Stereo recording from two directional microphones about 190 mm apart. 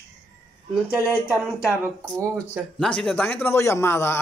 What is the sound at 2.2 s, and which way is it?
Speech, 10° right (ahead or behind).